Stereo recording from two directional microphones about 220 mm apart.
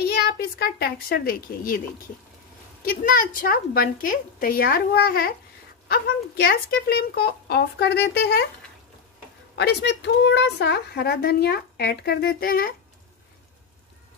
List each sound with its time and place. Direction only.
0.0 s a woman's voice: 45° left (ahead or behind)
2.9 s a woman's voice: 40° left (ahead or behind)
9.6 s a woman's voice: 50° left (ahead or behind)